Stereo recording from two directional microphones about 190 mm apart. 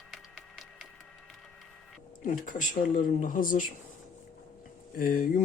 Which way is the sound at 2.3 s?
45° left (ahead or behind).